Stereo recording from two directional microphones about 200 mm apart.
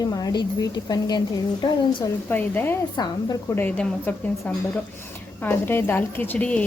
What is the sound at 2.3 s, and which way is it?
A woman's voice, 10° left (ahead or behind).